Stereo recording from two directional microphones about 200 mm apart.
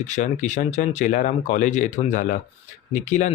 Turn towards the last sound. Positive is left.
turn(degrees=35)  # may be behind; listen again after turning